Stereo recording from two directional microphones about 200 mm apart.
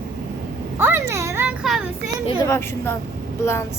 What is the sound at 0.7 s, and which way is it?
A child's voice, 10° right (ahead or behind).